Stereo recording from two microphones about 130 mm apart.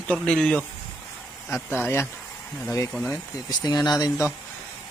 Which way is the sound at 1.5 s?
20° left (ahead or behind).